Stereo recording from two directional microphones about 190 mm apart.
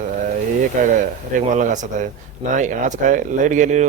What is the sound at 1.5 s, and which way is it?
Speech, 40° right (ahead or behind).